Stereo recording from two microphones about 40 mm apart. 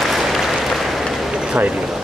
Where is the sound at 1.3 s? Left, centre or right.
Right.